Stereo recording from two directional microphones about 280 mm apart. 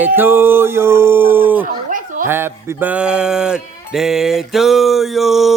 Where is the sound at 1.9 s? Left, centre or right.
Right.